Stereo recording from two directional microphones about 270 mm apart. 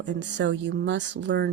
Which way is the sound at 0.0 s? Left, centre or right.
Right.